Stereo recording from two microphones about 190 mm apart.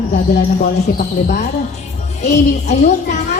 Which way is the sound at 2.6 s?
40° left (ahead or behind).